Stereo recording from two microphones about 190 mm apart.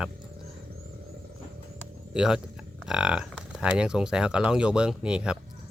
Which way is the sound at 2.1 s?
5° right (ahead or behind).